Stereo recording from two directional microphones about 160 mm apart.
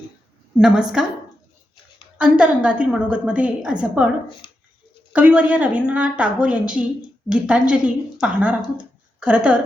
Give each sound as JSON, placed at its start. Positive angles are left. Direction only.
{"t": 0.6, "sound": "a woman's voice", "side_deg": -5}
{"t": 2.1, "sound": "a woman's voice", "side_deg": -5}
{"t": 4.4, "sound": "a sound", "side_deg": 30}
{"t": 5.1, "sound": "a woman's voice", "side_deg": -10}